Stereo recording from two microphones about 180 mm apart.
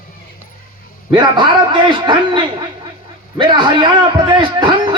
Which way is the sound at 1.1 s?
25° right (ahead or behind).